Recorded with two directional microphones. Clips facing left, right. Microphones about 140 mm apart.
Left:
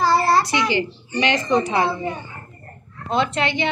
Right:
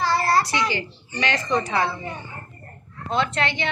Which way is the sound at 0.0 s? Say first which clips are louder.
Left 3 dB; 35° left (ahead or behind).